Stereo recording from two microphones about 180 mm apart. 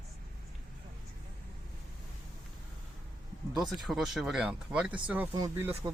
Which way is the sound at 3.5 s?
Centre (ahead or behind).